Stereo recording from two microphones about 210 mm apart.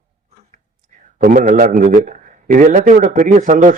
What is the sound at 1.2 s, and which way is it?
A man's voice, 40° right (ahead or behind).